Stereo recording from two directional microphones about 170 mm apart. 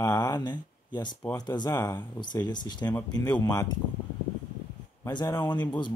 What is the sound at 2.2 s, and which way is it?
Speech, 25° left (ahead or behind).